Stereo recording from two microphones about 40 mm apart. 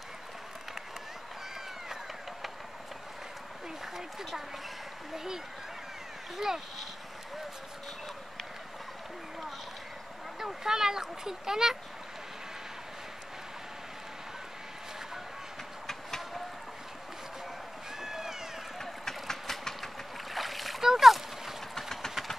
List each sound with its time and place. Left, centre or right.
3.8 s a sound: centre
5.1 s speech: centre
10.4 s speech: centre
18.0 s cat: centre
18.8 s vehicle: centre
20.3 s splash: centre